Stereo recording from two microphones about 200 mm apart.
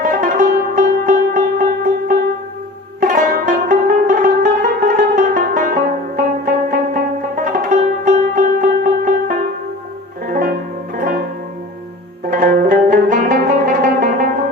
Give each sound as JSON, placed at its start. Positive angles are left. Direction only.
{"t": 0.0, "sound": "music", "side_deg": -45}
{"t": 12.3, "sound": "zither", "side_deg": -45}